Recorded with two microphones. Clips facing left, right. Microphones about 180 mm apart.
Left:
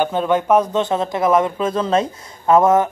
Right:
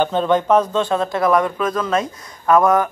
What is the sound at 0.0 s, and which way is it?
Speech, 10° left (ahead or behind).